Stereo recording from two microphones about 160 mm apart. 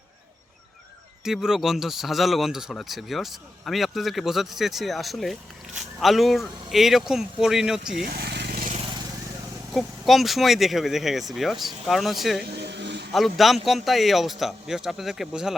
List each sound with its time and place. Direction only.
1.2 s speech: 5° right (ahead or behind)
8.0 s vehicle: 80° right
9.7 s speech: centre (ahead or behind)
12.6 s a sound: 90° right
13.1 s speech: centre (ahead or behind)